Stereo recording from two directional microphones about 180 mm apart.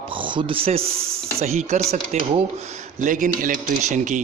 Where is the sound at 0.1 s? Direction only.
25° right (ahead or behind).